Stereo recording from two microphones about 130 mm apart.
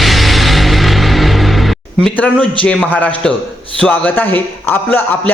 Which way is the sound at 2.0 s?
10° left (ahead or behind).